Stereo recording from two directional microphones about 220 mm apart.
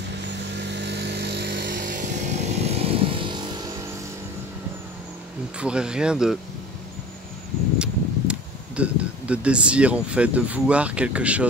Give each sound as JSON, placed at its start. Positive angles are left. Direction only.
{"t": 0.2, "sound": "vehicle", "side_deg": -50}
{"t": 5.6, "sound": "speech", "side_deg": -5}
{"t": 7.8, "sound": "speech", "side_deg": -5}